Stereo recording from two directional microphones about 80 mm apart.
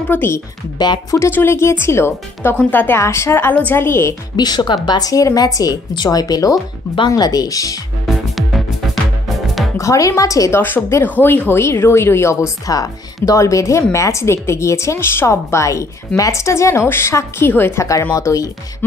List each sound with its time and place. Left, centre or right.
0.1 s a woman's voice: left
0.7 s speech: left
1.3 s a woman's voice: left
3.0 s speech: left
4.4 s a woman's voice: left
8.1 s music: centre
9.8 s a woman's voice: left
10.6 s a woman's voice: left
18.1 s a woman's voice: left